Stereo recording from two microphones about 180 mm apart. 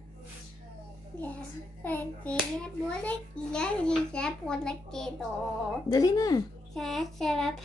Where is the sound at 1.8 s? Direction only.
10° left (ahead or behind).